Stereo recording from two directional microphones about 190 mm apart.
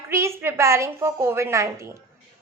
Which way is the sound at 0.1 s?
15° right (ahead or behind).